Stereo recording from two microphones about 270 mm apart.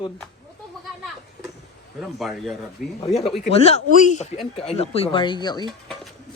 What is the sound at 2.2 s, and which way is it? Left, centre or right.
Speech, centre.